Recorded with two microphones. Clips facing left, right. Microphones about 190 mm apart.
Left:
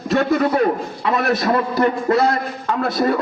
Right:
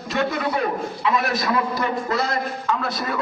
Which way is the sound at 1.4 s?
50° left (ahead or behind).